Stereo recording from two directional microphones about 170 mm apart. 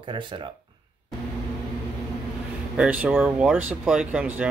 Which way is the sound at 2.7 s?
5° right (ahead or behind).